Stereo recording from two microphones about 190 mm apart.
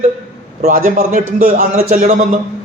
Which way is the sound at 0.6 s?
45° right (ahead or behind).